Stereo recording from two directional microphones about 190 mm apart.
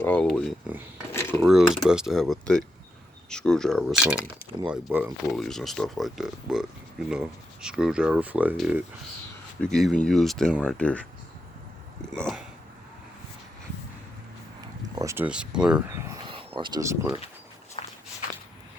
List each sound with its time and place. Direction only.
0.0 s speech: 5° left (ahead or behind)
1.1 s a sound: 10° left (ahead or behind)
1.4 s speech: centre (ahead or behind)
5.4 s speech: centre (ahead or behind)
12.2 s speech: centre (ahead or behind)
14.9 s speech: 15° right (ahead or behind)
16.2 s speech: 25° right (ahead or behind)
17.8 s walk: 30° left (ahead or behind)